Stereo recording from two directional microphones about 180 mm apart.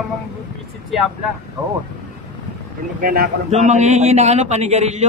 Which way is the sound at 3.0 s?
50° right (ahead or behind).